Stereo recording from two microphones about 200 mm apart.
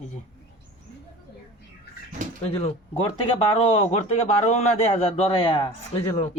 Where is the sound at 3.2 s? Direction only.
30° left (ahead or behind).